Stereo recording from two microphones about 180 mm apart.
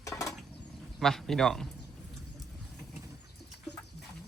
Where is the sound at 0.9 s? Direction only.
Centre (ahead or behind).